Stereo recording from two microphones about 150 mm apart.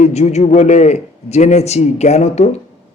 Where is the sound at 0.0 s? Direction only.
50° left (ahead or behind).